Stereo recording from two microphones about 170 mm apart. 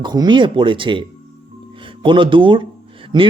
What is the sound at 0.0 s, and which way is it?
A man's voice, 25° right (ahead or behind).